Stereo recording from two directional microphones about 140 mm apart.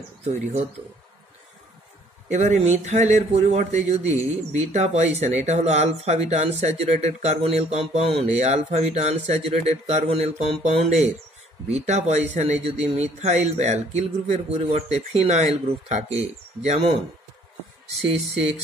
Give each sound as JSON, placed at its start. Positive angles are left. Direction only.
{"t": 0.2, "sound": "speech", "side_deg": -50}
{"t": 2.3, "sound": "a man's voice", "side_deg": -55}